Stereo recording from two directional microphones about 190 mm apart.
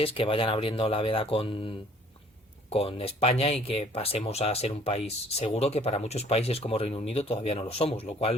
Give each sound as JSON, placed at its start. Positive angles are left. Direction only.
{"t": 0.0, "sound": "speech", "side_deg": 30}